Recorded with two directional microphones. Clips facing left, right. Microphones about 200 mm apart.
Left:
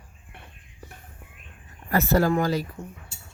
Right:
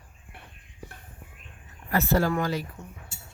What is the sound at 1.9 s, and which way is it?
Speech, 40° left (ahead or behind).